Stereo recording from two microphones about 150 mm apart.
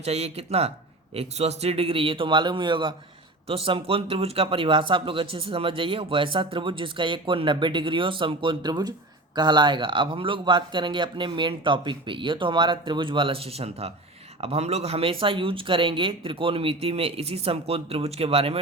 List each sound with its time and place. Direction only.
0.0 s speech: 45° right (ahead or behind)